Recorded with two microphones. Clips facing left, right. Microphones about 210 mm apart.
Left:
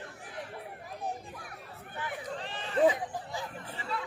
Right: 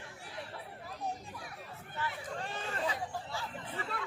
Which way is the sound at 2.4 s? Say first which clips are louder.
Even; 45° right (ahead or behind).